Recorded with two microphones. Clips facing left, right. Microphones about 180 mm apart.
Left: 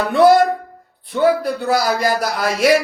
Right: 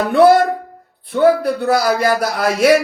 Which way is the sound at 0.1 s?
55° right (ahead or behind).